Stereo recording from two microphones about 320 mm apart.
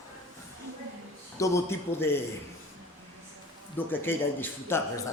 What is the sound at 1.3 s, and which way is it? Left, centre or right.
Speech, centre.